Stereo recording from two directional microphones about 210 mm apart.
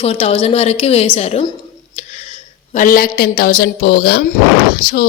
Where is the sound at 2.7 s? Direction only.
40° left (ahead or behind).